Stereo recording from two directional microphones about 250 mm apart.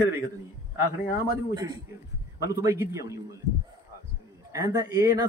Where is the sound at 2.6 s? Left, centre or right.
Centre.